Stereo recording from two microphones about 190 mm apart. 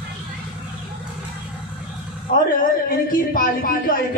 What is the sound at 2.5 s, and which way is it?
Speech, 45° left (ahead or behind).